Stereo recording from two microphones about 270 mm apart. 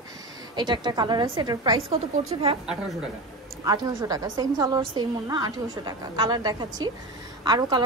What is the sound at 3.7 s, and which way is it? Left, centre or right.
A woman's voice, centre.